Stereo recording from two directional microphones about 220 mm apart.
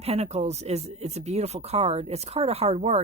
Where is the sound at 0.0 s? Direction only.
30° right (ahead or behind).